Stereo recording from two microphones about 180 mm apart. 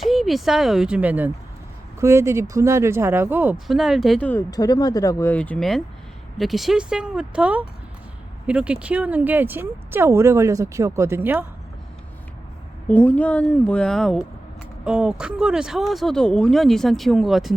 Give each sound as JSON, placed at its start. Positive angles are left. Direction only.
{"t": 0.0, "sound": "speech", "side_deg": 0}
{"t": 4.5, "sound": "speech", "side_deg": 20}
{"t": 5.3, "sound": "speech", "side_deg": 5}
{"t": 12.9, "sound": "speech", "side_deg": 10}